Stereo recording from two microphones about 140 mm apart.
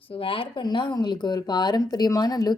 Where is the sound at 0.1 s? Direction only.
40° left (ahead or behind).